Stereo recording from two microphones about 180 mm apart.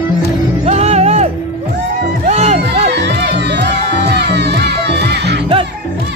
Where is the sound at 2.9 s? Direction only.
70° right (ahead or behind).